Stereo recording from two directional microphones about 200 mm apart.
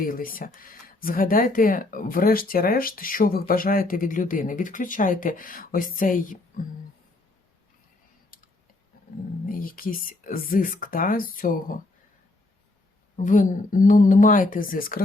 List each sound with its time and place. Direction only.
0.0 s speech: 45° left (ahead or behind)
9.6 s speech: 45° left (ahead or behind)
13.1 s speech: 40° left (ahead or behind)